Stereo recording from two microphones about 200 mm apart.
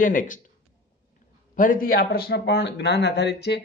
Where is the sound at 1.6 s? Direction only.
45° left (ahead or behind).